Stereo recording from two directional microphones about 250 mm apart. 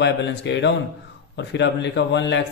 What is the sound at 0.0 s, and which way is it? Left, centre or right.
Speech, left.